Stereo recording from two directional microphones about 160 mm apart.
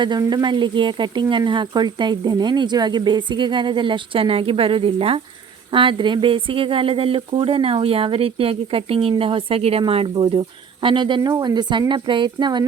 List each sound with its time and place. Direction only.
0.0 s speech: 25° right (ahead or behind)